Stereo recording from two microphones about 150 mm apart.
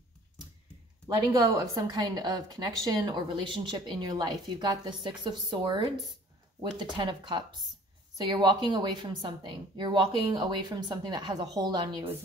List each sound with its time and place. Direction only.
1.1 s a woman's voice: 25° right (ahead or behind)